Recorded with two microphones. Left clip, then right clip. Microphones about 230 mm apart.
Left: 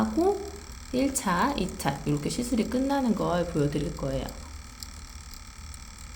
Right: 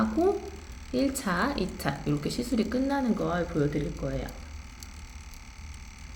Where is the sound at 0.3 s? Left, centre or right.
Centre.